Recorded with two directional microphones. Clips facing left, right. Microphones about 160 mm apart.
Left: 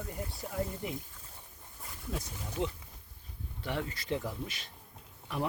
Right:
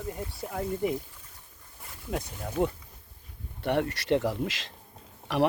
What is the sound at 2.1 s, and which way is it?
Speech, 60° right (ahead or behind).